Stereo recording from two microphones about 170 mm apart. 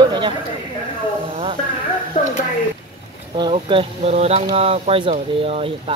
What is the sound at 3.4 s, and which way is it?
Speech, 30° right (ahead or behind).